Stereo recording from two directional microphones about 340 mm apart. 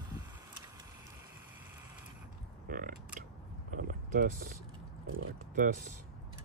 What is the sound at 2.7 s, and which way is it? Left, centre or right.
Creak, right.